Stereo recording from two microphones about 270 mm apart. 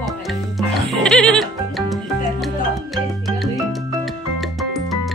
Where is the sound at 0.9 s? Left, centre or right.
Centre.